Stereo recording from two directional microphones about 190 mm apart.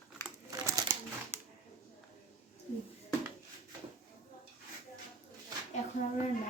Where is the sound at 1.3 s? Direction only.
10° right (ahead or behind).